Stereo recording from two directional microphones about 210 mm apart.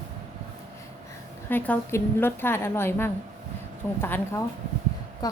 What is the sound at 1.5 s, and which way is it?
A woman's voice, 10° left (ahead or behind).